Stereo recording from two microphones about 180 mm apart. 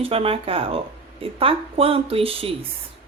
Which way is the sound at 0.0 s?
30° right (ahead or behind).